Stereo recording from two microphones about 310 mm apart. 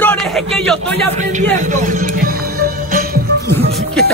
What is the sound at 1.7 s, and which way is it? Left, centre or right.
Music, right.